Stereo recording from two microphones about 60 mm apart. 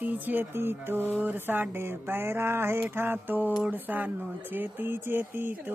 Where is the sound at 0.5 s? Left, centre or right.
Right.